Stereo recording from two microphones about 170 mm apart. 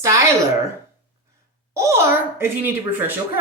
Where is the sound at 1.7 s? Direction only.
15° right (ahead or behind).